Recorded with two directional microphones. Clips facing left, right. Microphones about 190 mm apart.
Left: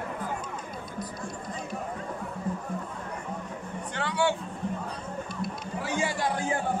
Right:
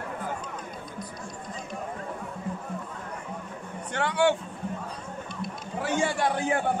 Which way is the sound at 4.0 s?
55° right (ahead or behind).